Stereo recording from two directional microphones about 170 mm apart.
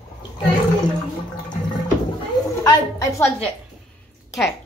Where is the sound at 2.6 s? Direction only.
20° left (ahead or behind).